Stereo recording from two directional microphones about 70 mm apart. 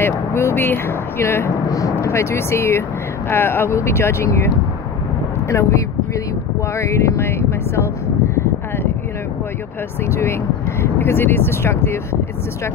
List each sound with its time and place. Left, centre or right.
0.0 s speech: left
5.5 s speech: left
10.8 s speech: left